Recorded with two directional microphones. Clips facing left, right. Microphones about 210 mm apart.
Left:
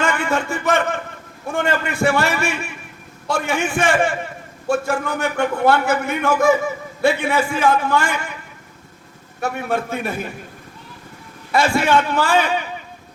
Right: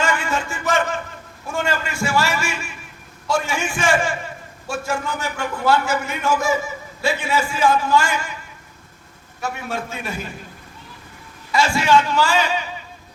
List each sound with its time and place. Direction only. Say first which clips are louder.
0.0 s a sound: left 2 dB; 60° left (ahead or behind)
1.5 s a man's voice: left 3 dB; 55° left (ahead or behind)
9.4 s a man's voice: left 5 dB; 60° left (ahead or behind)
11.5 s a man's voice: left 1 dB; 60° left (ahead or behind)